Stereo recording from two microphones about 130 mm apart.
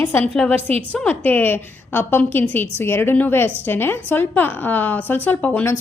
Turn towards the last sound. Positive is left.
turn(degrees=10)  # may be behind; listen again after turning